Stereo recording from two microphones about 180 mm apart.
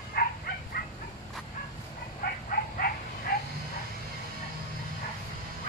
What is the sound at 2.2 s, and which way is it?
Frog, 55° left (ahead or behind).